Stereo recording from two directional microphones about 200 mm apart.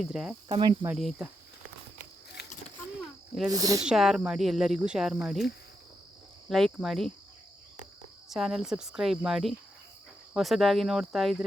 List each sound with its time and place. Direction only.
0.0 s cricket: centre (ahead or behind)
0.4 s cricket: 25° right (ahead or behind)
0.9 s cricket: centre (ahead or behind)
2.4 s a sound: 55° left (ahead or behind)
3.5 s speech: 20° right (ahead or behind)
3.8 s cricket: centre (ahead or behind)
6.5 s cricket: centre (ahead or behind)
8.3 s cricket: centre (ahead or behind)